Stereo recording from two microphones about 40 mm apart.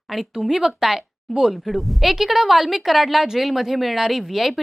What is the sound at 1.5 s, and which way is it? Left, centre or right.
A woman's voice, centre.